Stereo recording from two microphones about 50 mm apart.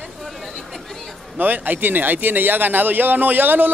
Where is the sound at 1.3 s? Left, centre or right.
Right.